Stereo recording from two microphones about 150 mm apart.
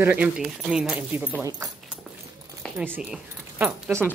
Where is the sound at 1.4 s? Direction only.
20° right (ahead or behind).